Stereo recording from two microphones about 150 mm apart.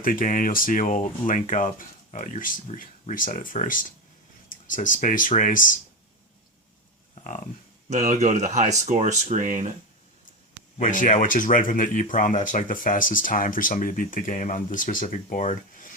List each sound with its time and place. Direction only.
0.0 s speech: 65° left (ahead or behind)
7.2 s speech: 50° left (ahead or behind)
7.9 s speech: 50° right (ahead or behind)
10.8 s speech: 60° left (ahead or behind)